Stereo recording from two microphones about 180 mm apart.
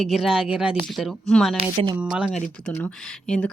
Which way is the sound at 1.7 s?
30° right (ahead or behind).